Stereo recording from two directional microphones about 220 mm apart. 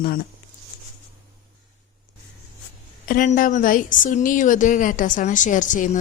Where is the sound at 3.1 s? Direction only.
40° left (ahead or behind).